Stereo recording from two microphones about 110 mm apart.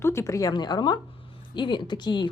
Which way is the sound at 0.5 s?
40° left (ahead or behind).